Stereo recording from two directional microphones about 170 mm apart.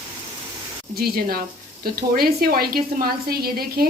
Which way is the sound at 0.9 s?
60° right (ahead or behind).